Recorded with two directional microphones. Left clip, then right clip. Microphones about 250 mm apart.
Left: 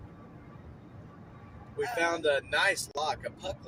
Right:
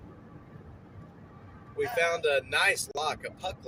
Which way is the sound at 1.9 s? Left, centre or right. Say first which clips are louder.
Right 1 dB; centre.